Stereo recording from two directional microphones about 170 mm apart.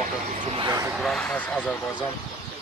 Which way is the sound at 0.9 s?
5° left (ahead or behind).